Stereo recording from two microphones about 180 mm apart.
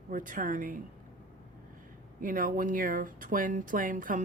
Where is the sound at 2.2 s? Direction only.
50° right (ahead or behind).